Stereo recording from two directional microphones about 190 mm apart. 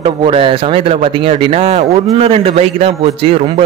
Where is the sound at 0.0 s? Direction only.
30° right (ahead or behind).